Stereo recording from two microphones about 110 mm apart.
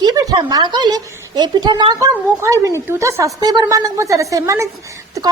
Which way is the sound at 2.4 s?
30° right (ahead or behind).